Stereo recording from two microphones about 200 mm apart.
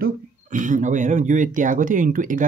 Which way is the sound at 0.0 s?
40° right (ahead or behind).